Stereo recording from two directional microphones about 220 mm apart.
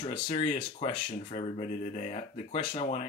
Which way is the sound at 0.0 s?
25° left (ahead or behind).